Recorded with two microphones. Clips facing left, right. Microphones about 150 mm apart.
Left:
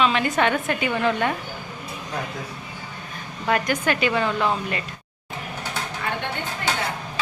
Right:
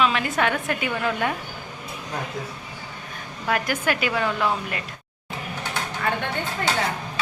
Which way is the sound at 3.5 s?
5° right (ahead or behind).